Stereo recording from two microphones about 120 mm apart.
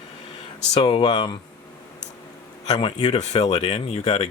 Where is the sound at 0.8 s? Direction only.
45° left (ahead or behind).